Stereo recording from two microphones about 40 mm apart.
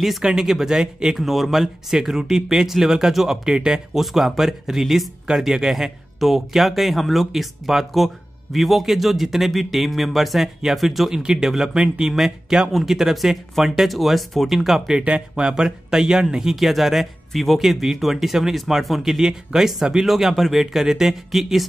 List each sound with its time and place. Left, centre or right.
0.2 s speech: centre
1.1 s speech: centre
4.0 s speech: centre
11.1 s speech: centre
14.6 s speech: centre
15.0 s speech: right
15.4 s speech: centre